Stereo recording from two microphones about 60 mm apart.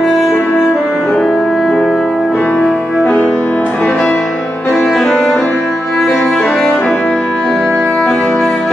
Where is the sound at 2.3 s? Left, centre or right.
Left.